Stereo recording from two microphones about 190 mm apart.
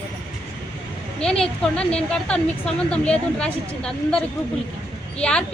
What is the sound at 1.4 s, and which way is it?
Speech, 5° left (ahead or behind).